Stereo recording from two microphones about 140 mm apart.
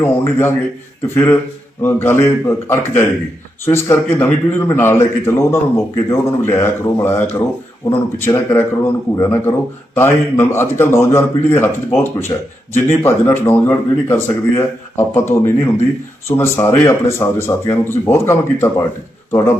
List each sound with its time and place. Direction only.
0.0 s speech: 15° left (ahead or behind)